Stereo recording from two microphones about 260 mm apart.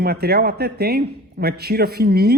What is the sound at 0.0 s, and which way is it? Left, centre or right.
Speech, right.